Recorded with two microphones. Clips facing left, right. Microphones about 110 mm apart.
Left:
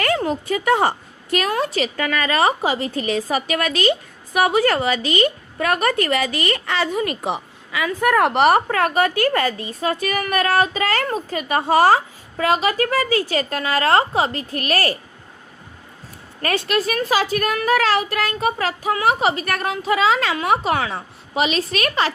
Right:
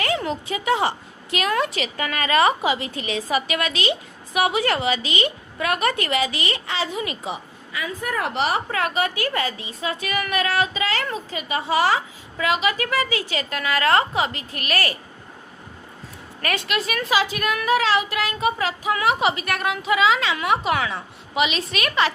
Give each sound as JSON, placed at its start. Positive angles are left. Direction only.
{"t": 0.2, "sound": "a woman's voice", "side_deg": 45}
{"t": 16.4, "sound": "a woman's voice", "side_deg": 35}